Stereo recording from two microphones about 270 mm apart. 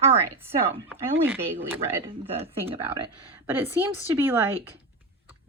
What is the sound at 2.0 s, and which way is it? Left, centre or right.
Speech, centre.